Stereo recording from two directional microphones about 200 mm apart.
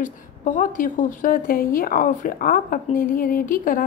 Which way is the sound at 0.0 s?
40° left (ahead or behind).